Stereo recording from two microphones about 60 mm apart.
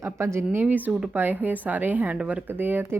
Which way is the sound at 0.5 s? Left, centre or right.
Right.